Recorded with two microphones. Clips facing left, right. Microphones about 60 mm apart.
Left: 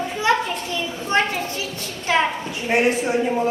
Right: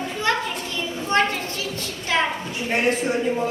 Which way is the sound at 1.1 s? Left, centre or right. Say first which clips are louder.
Even; centre.